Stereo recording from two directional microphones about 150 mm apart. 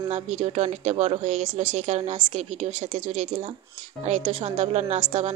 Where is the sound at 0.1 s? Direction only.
50° right (ahead or behind).